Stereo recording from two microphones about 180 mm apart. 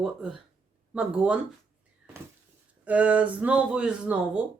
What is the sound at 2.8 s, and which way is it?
Speech, 5° right (ahead or behind).